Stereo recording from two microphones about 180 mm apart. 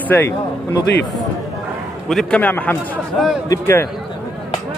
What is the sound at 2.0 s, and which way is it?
A man's voice, 5° left (ahead or behind).